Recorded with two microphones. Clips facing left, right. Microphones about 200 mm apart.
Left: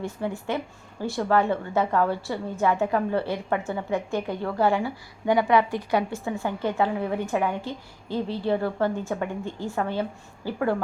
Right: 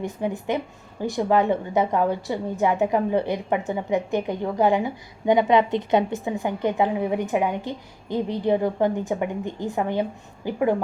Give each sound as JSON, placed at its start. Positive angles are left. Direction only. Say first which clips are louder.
{"t": 0.0, "sound": "a woman's voice", "louder": "right 3 dB", "side_deg": -20}